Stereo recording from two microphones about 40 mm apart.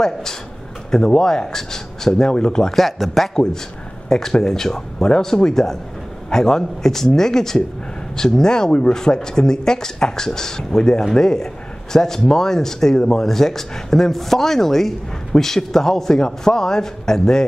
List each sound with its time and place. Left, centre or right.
0.0 s speech: centre
2.7 s speech: centre
4.1 s speech: centre